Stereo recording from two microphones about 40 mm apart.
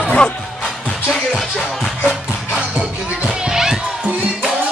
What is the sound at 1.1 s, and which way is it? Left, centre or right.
Music, centre.